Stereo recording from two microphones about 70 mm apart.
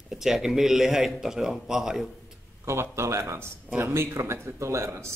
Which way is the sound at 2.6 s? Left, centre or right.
Right.